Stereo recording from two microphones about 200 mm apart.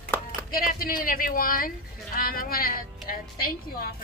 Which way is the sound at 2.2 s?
45° left (ahead or behind).